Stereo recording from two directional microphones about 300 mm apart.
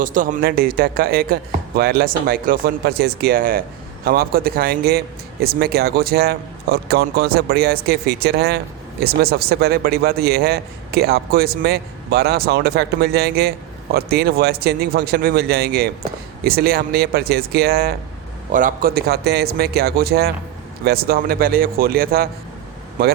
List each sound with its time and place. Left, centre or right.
0.0 s speech: right